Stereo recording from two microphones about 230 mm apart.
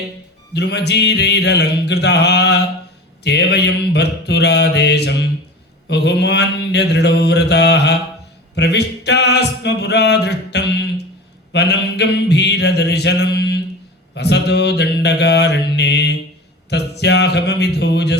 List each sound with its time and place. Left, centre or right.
0.5 s mantra: left
8.5 s a sound: left
11.5 s mantra: left